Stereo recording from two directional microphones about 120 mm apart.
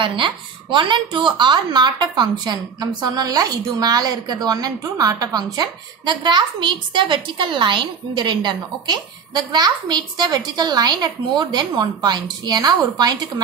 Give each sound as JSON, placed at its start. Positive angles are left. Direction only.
{"t": 0.0, "sound": "a woman's voice", "side_deg": -40}